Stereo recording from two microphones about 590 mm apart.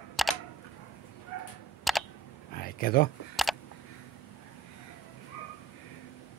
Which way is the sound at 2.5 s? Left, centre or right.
Centre.